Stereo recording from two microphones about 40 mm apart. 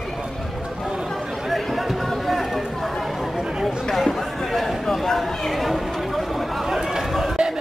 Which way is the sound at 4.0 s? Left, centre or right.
Centre.